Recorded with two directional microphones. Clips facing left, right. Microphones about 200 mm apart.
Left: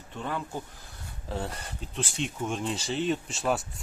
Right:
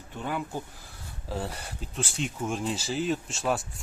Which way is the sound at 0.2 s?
5° right (ahead or behind).